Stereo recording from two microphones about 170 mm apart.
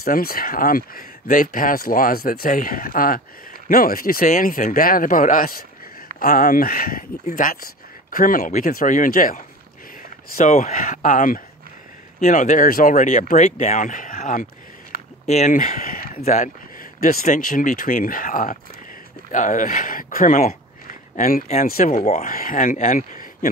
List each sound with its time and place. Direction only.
0.0 s speech: 60° left (ahead or behind)
16.2 s speech: 45° left (ahead or behind)
17.0 s speech: 55° left (ahead or behind)